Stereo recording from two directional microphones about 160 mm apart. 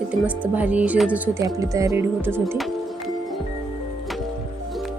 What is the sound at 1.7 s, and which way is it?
Music, 20° right (ahead or behind).